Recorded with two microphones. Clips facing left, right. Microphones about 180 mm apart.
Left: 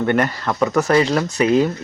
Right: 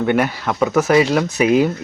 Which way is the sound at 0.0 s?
5° right (ahead or behind).